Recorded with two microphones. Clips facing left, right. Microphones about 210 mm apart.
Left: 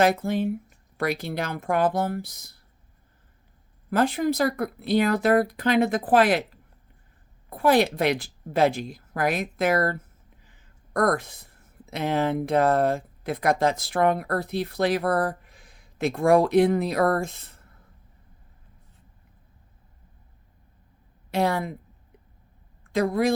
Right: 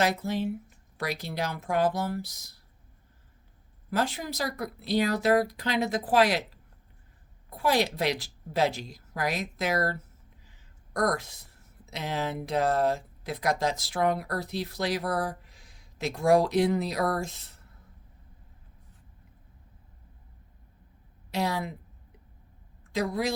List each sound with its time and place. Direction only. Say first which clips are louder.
0.0 s speech: left 5 dB; 55° left (ahead or behind)
3.8 s speech: left 8 dB; 55° left (ahead or behind)
7.5 s speech: left 6 dB; 55° left (ahead or behind)
10.4 s a sound: left 1 dB; 55° left (ahead or behind)
11.9 s speech: left 7 dB; 55° left (ahead or behind)
21.2 s a woman's voice: left 5 dB; 55° left (ahead or behind)
22.9 s speech: left 6 dB; 55° left (ahead or behind)